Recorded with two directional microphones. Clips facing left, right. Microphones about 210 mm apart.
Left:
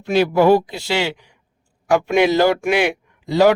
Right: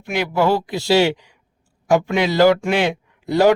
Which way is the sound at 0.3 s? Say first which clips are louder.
Left 2 dB; 20° left (ahead or behind).